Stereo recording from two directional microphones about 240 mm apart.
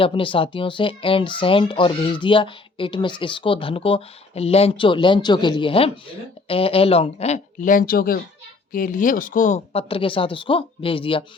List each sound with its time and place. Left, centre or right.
0.0 s speech: left